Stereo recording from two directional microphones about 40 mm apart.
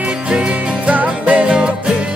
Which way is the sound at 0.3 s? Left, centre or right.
Right.